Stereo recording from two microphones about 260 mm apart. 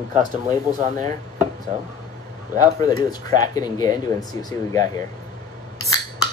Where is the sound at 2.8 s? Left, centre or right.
Centre.